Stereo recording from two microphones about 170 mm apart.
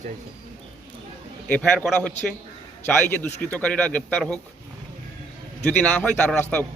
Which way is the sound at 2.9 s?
10° left (ahead or behind).